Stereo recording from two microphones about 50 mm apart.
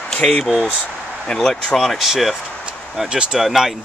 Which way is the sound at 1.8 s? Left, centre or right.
Centre.